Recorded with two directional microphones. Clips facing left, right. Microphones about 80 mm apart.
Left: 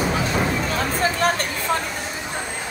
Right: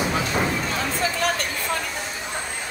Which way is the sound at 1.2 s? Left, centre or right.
Left.